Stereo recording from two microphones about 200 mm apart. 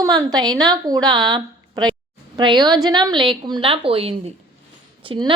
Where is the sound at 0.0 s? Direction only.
20° right (ahead or behind).